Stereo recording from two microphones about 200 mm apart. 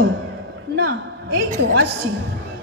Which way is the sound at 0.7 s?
65° right (ahead or behind).